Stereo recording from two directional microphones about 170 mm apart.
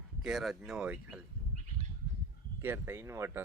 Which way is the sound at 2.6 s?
15° right (ahead or behind).